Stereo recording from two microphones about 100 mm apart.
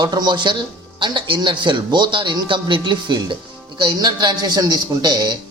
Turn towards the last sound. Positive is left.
turn(degrees=-45)  # may be behind; listen again after turning